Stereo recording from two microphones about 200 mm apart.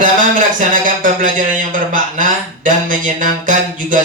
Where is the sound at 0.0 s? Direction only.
40° right (ahead or behind).